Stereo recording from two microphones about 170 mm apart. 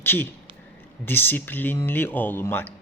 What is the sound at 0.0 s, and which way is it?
Speech, 10° left (ahead or behind).